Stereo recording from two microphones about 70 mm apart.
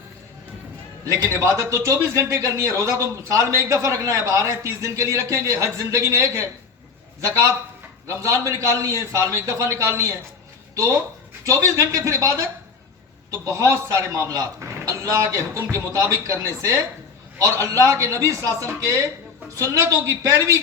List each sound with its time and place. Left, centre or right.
1.4 s a man's voice: right
8.0 s a man's voice: right
11.4 s a man's voice: right
14.1 s a man's voice: right